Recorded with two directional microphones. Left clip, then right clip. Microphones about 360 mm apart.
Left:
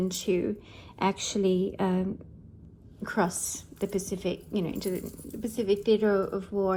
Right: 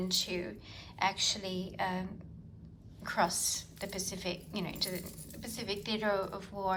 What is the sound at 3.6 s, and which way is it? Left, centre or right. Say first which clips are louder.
Speech: left 8 dB; centre.